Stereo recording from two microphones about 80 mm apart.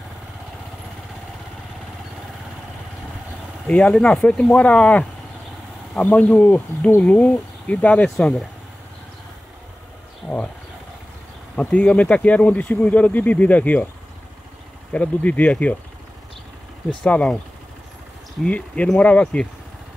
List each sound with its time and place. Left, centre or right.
3.6 s speech: centre
11.6 s speech: centre
14.9 s speech: centre
17.0 s speech: centre
18.4 s speech: centre